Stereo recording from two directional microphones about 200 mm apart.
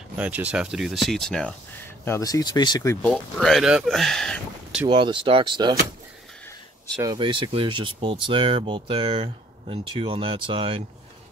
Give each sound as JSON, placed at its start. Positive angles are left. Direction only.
{"t": 0.2, "sound": "speech", "side_deg": -5}
{"t": 2.0, "sound": "speech", "side_deg": 15}
{"t": 3.1, "sound": "speech", "side_deg": 0}
{"t": 4.8, "sound": "speech", "side_deg": -25}
{"t": 7.0, "sound": "speech", "side_deg": -20}